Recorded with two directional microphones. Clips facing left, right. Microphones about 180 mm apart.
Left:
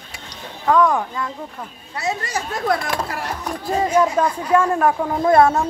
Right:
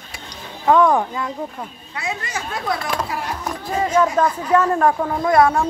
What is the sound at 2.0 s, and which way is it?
Speech, 40° left (ahead or behind).